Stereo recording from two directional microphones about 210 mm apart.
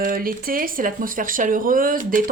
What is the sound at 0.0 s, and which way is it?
A woman's voice, 40° right (ahead or behind).